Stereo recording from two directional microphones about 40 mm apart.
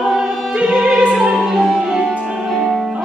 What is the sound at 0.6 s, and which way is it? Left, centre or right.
Music, right.